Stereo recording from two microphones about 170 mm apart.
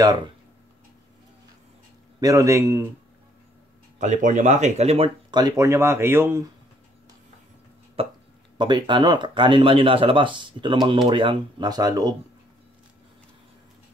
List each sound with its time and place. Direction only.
2.1 s a man's voice: 20° right (ahead or behind)
4.0 s speech: 45° right (ahead or behind); by 6.4 s 15° right (ahead or behind)
8.0 s speech: 35° right (ahead or behind)